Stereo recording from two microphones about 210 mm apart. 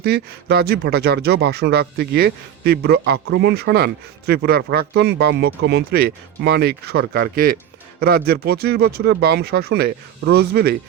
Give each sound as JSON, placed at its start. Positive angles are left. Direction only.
{"t": 0.0, "sound": "speech", "side_deg": -50}